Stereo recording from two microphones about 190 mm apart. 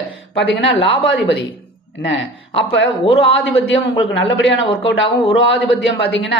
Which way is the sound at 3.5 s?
80° left.